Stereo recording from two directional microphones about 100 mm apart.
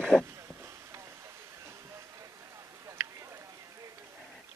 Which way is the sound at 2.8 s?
30° right (ahead or behind).